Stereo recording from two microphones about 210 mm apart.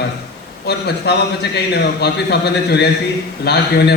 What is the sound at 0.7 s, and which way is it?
A man's voice, 50° left (ahead or behind).